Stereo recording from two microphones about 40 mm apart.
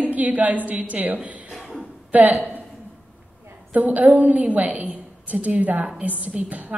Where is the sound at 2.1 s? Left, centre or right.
Right.